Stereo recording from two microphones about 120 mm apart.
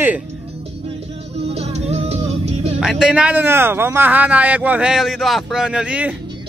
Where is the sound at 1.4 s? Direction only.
60° right (ahead or behind).